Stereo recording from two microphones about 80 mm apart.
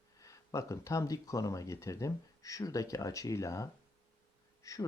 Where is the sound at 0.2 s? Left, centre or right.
Left.